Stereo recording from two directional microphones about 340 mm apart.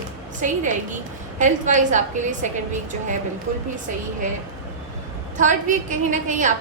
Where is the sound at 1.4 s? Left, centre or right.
Right.